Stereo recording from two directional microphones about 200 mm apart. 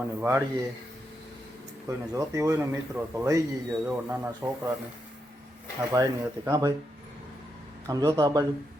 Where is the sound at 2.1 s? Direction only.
15° right (ahead or behind).